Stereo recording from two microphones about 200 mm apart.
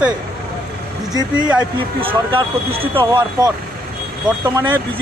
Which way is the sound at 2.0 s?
25° right (ahead or behind).